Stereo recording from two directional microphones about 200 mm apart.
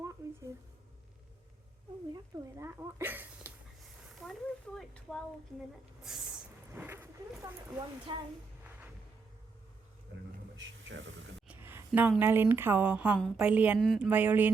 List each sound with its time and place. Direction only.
2.6 s speech: 15° right (ahead or behind)
4.2 s a woman's voice: centre (ahead or behind)
8.1 s a woman's voice: 25° right (ahead or behind)
10.6 s speech: 70° right (ahead or behind)
11.4 s a sound: 10° right (ahead or behind)
11.9 s a woman's voice: 5° right (ahead or behind)